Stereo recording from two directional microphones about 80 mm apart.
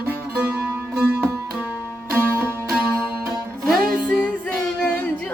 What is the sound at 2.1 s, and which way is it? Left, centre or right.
Music, right.